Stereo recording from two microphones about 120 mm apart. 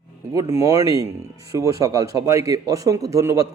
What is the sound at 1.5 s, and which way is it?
Speech, 30° right (ahead or behind).